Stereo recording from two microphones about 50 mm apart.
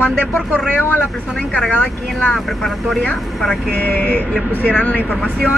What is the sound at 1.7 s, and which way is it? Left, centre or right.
Speech, left.